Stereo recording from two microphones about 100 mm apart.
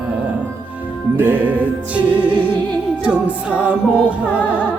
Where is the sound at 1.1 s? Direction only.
20° right (ahead or behind).